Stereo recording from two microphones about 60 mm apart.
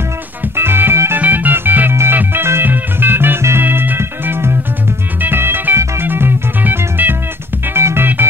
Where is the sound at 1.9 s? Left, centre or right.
Right.